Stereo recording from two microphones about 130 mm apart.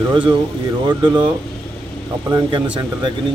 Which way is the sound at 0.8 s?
35° right (ahead or behind).